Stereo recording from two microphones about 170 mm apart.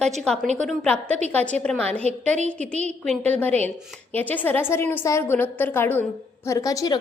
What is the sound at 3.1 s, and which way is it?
A woman's voice, 10° left (ahead or behind).